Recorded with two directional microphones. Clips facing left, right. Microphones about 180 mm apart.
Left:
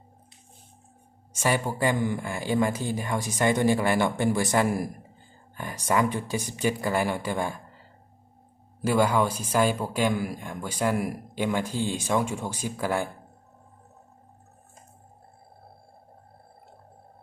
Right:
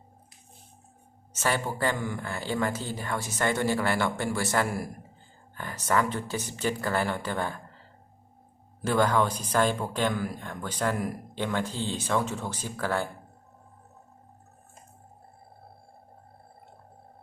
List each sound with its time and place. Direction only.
1.3 s speech: 10° left (ahead or behind)
8.8 s speech: 10° left (ahead or behind)